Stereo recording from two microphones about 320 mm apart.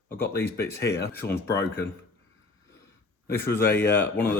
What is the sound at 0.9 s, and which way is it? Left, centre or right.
Speech, left.